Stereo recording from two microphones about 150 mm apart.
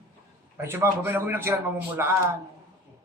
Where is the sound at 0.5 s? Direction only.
15° right (ahead or behind).